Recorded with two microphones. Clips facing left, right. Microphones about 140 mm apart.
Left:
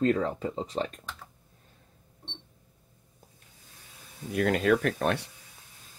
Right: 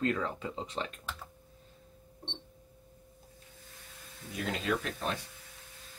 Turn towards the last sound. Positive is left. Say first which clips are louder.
# left 8 dB
turn(degrees=65)  # may be behind; listen again after turning